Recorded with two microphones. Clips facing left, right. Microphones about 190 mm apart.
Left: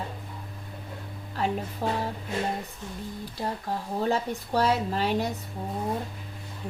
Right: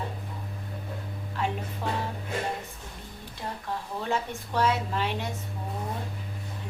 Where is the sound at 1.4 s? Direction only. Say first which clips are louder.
Left 2 dB; 40° left (ahead or behind).